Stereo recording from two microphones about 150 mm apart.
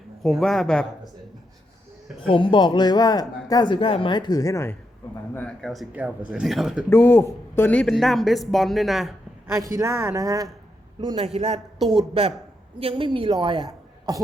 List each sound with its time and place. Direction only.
0.2 s speech: centre (ahead or behind)
2.2 s speech: 35° left (ahead or behind); by 5.9 s centre (ahead or behind)
5.9 s speech: 10° right (ahead or behind)
6.9 s speech: 15° left (ahead or behind); by 9.1 s centre (ahead or behind)
9.5 s a man's voice: 20° right (ahead or behind)
11.3 s a woman's voice: 45° right (ahead or behind); by 14.2 s 25° right (ahead or behind)